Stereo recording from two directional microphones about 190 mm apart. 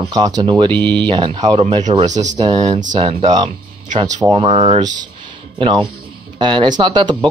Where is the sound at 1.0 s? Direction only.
25° right (ahead or behind).